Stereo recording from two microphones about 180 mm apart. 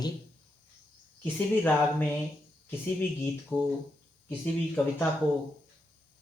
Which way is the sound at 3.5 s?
10° left (ahead or behind).